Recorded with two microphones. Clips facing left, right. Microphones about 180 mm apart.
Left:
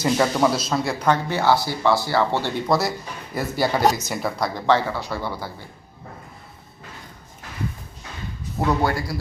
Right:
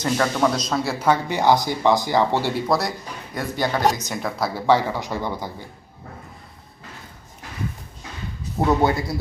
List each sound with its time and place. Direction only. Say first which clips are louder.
0.0 s speech: left 1 dB; 10° left (ahead or behind); by 2.6 s 10° right (ahead or behind)
2.6 s speech: left 1 dB; centre (ahead or behind); by 5.6 s 15° right (ahead or behind)
8.6 s speech: right 3 dB; 20° right (ahead or behind)